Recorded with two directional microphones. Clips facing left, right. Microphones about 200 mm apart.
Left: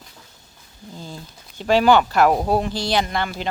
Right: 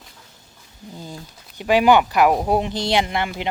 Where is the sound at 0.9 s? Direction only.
15° right (ahead or behind).